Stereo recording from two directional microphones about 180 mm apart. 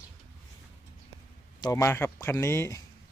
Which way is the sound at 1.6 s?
15° left (ahead or behind).